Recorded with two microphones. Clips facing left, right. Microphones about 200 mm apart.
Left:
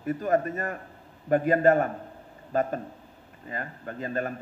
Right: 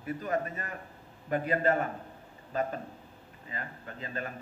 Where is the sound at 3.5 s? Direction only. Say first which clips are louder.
Left 6 dB; 50° left (ahead or behind).